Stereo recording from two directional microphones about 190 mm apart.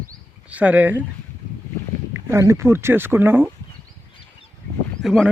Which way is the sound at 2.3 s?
15° right (ahead or behind).